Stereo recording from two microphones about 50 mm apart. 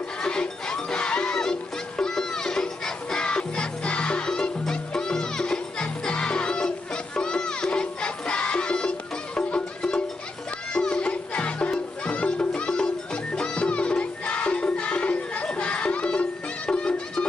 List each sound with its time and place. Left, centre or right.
0.2 s music: centre
7.2 s crowd: centre
10.7 s music: centre